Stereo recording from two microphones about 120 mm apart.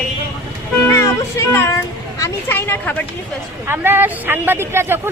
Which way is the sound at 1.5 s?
25° left (ahead or behind).